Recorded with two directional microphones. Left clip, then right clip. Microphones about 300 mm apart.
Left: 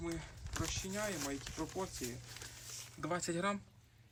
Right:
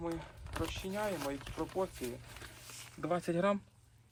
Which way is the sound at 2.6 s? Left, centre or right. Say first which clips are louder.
Even; right.